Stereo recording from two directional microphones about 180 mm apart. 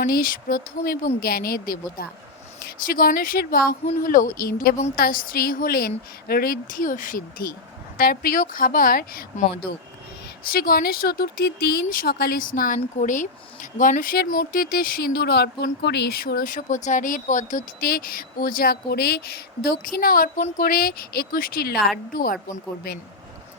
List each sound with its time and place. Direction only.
0.0 s speech: 55° left (ahead or behind)
10.5 s speech: 55° left (ahead or behind)